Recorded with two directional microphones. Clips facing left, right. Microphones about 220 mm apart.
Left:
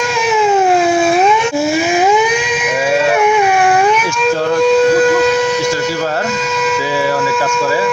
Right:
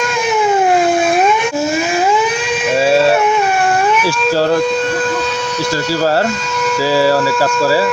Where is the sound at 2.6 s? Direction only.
30° right (ahead or behind).